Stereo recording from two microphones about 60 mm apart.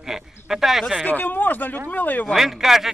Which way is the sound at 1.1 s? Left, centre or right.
Left.